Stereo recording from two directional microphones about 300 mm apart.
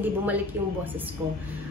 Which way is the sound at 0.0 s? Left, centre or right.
Centre.